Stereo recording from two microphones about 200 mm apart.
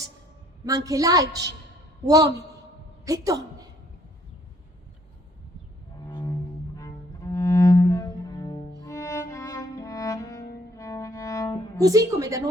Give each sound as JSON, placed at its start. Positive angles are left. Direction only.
{"t": 0.9, "sound": "a woman's voice", "side_deg": -15}
{"t": 6.1, "sound": "cello", "side_deg": 20}
{"t": 10.8, "sound": "music", "side_deg": 15}
{"t": 11.8, "sound": "a woman's voice", "side_deg": -15}